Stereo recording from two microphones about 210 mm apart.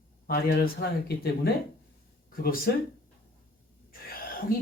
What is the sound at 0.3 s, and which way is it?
Speech, 45° left (ahead or behind).